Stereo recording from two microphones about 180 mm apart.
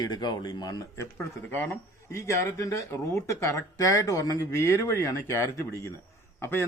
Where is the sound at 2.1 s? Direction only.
15° left (ahead or behind).